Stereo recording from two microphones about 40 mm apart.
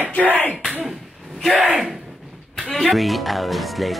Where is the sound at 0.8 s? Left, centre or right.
Centre.